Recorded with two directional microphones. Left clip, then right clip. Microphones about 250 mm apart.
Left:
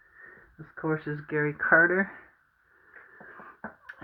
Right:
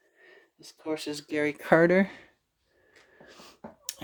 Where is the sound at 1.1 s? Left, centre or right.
Right.